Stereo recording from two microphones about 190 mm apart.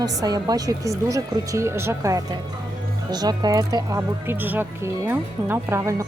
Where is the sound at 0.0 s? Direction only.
20° right (ahead or behind).